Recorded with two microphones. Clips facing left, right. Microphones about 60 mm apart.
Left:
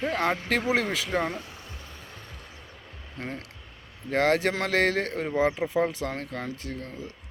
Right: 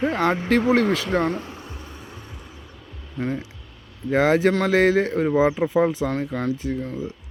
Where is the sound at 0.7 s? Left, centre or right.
Centre.